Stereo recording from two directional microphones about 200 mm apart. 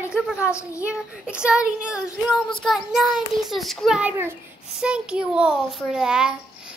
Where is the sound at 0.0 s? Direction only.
5° right (ahead or behind).